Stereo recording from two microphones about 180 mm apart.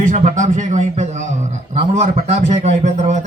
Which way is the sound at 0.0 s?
45° right (ahead or behind).